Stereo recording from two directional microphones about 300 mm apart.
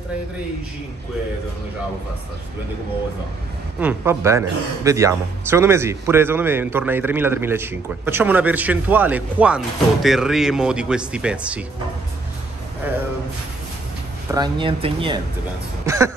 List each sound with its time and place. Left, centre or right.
3.8 s a man's voice: centre
14.3 s a man's voice: centre